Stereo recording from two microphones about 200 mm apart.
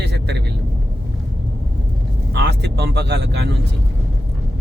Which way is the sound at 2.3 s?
60° right (ahead or behind).